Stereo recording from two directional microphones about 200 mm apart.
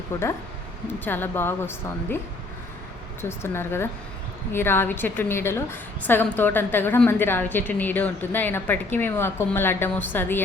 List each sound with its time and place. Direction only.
0.1 s a woman's voice: 10° left (ahead or behind)
3.2 s a woman's voice: 10° left (ahead or behind)